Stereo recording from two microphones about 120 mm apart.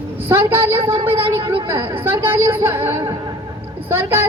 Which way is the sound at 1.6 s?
20° right (ahead or behind).